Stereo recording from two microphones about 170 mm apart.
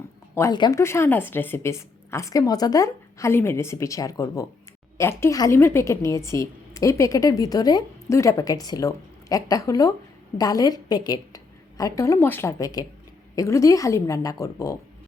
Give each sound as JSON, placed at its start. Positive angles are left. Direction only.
{"t": 0.3, "sound": "a woman's voice", "side_deg": 20}